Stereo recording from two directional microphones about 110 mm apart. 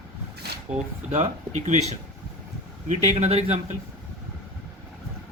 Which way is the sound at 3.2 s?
70° right (ahead or behind).